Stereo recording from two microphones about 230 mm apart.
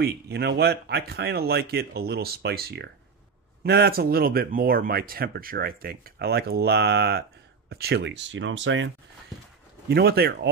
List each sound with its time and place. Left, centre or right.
0.0 s speech: right